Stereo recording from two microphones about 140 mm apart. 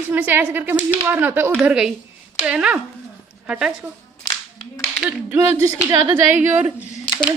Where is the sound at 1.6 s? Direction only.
5° right (ahead or behind).